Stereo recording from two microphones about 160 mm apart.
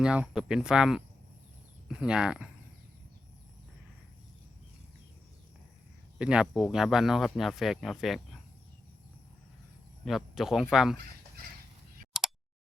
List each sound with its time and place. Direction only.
0.0 s speech: 5° right (ahead or behind)
6.1 s speech: 5° right (ahead or behind)
10.1 s speech: centre (ahead or behind)
12.1 s a sound: centre (ahead or behind)